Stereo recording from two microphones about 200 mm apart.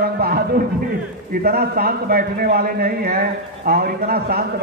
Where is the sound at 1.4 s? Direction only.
50° right (ahead or behind).